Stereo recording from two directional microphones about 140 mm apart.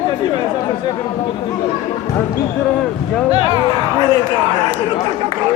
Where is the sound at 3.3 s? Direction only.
30° left (ahead or behind).